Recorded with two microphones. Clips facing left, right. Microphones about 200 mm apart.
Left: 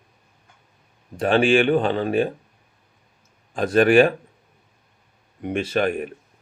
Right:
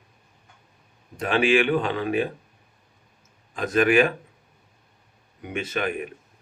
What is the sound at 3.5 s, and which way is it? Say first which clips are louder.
Speech: left 4 dB; 35° left (ahead or behind).